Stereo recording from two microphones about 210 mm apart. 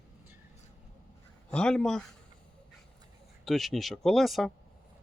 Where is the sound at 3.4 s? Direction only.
Centre (ahead or behind).